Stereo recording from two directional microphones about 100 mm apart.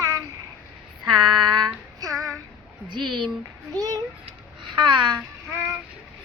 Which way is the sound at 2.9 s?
55° right (ahead or behind).